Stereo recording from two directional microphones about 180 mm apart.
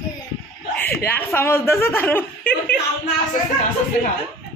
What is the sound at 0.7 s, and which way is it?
Speech, 10° left (ahead or behind).